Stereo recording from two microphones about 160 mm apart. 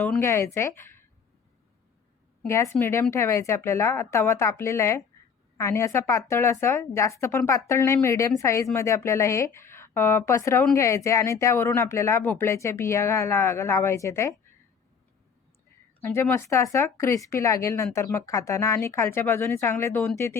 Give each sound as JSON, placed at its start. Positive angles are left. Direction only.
{"t": 0.2, "sound": "a woman's voice", "side_deg": 15}
{"t": 2.5, "sound": "a woman's voice", "side_deg": 15}
{"t": 16.0, "sound": "a woman's voice", "side_deg": 15}